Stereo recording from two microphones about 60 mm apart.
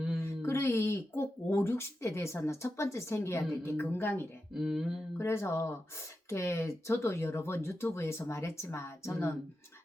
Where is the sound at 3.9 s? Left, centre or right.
Left.